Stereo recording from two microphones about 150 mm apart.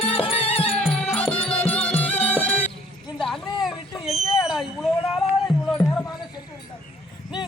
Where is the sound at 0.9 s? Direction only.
5° left (ahead or behind).